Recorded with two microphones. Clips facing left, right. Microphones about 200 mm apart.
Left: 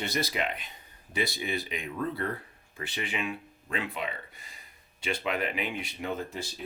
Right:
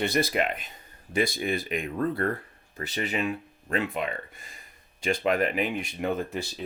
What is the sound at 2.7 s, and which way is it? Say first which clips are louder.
Speech: right 5 dB; 40° right (ahead or behind).